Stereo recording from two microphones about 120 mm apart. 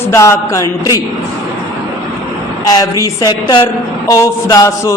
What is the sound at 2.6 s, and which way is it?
A woman's voice, 30° left (ahead or behind).